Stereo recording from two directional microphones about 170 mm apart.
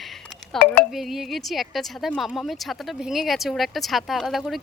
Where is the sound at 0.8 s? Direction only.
Centre (ahead or behind).